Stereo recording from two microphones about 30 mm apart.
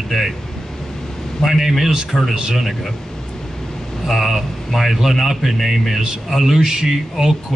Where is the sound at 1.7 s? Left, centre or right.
Centre.